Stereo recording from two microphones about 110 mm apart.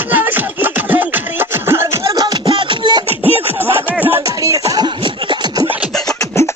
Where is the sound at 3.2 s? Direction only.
20° right (ahead or behind).